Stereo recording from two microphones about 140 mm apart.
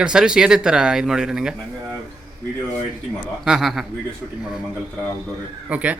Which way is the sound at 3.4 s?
5° right (ahead or behind).